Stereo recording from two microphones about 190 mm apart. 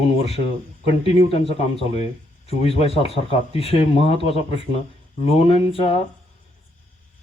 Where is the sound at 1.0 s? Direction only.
30° left (ahead or behind).